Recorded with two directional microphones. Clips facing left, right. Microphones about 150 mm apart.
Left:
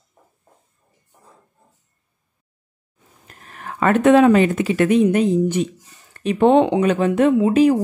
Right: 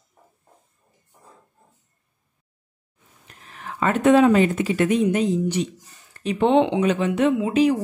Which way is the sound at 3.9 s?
65° left (ahead or behind).